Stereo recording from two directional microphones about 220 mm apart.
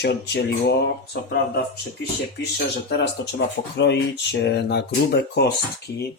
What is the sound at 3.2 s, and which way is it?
Speech, 55° left (ahead or behind).